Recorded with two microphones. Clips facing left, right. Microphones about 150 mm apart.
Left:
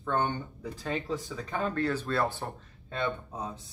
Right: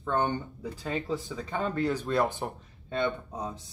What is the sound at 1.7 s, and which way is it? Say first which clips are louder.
Speech: right 3 dB; 15° right (ahead or behind).